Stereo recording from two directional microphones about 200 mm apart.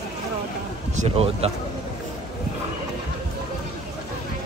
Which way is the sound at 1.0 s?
30° right (ahead or behind).